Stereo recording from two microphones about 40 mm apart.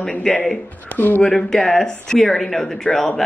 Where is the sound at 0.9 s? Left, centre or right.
Left.